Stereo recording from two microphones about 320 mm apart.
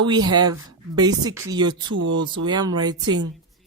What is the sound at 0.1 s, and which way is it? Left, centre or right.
A woman's voice, centre.